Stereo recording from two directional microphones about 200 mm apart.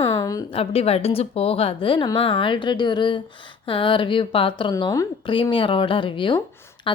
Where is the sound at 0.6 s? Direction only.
30° left (ahead or behind).